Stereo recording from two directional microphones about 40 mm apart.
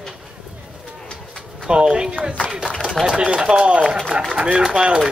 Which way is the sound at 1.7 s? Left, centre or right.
Right.